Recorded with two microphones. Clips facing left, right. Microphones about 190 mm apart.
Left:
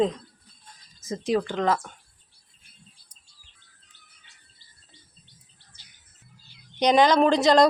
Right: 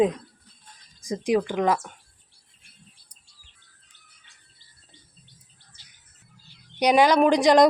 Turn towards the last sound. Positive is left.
turn(degrees=-15)  # may be behind; listen again after turning